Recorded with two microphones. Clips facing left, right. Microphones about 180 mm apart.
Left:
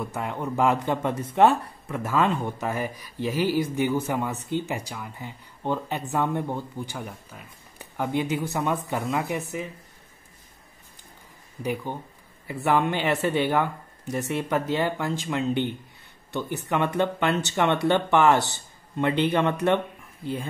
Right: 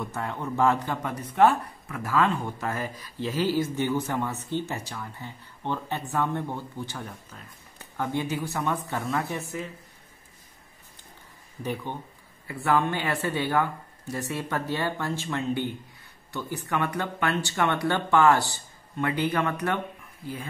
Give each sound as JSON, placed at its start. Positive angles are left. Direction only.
{"t": 0.0, "sound": "speech", "side_deg": 15}
{"t": 11.6, "sound": "speech", "side_deg": 10}